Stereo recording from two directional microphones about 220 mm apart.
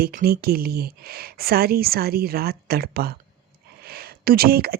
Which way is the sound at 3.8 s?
45° right (ahead or behind).